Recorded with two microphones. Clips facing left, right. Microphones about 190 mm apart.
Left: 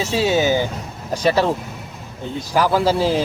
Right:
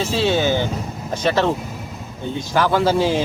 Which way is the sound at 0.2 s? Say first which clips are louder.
Left 2 dB; 10° left (ahead or behind).